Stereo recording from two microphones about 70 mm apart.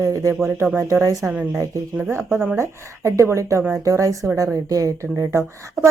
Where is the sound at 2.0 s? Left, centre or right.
Right.